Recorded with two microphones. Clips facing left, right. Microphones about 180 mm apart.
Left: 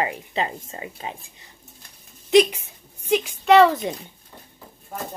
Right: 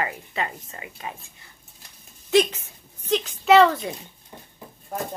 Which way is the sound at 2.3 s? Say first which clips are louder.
Left 3 dB; 15° left (ahead or behind).